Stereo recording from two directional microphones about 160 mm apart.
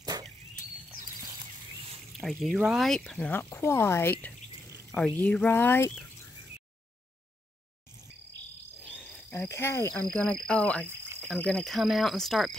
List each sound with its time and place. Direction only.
0.0 s a sound: 25° right (ahead or behind)
2.1 s speech: centre (ahead or behind)
9.3 s speech: 15° left (ahead or behind)
11.1 s cricket: 5° left (ahead or behind)